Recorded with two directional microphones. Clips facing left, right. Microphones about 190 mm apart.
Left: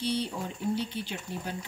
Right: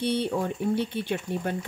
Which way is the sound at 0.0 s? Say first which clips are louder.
Right 5 dB; 55° right (ahead or behind).